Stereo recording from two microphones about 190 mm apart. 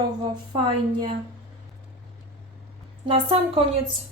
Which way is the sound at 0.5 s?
25° right (ahead or behind).